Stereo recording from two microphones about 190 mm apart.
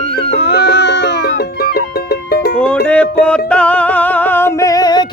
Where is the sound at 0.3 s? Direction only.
65° left (ahead or behind).